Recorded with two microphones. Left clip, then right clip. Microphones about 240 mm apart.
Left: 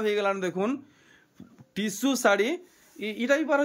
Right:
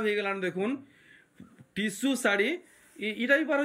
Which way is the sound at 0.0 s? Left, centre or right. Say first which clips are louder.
Left 3 dB; centre.